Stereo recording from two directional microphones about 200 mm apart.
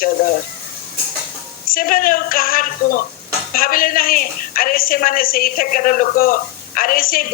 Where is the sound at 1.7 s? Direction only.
45° left (ahead or behind).